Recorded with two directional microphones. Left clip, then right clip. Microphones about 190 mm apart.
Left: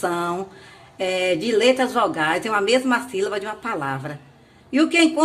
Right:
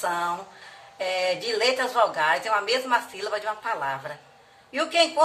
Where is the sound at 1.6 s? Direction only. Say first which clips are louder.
Left 2 dB; 55° left (ahead or behind).